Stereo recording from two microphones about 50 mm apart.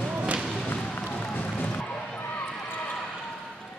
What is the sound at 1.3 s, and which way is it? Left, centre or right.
Music, left.